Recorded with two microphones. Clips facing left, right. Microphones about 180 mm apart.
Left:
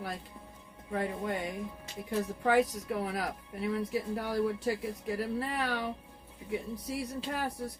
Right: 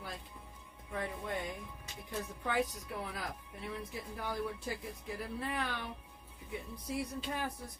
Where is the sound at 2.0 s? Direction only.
85° left.